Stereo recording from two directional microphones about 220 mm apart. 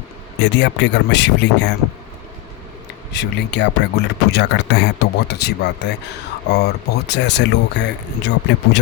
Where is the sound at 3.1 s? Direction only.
50° left (ahead or behind).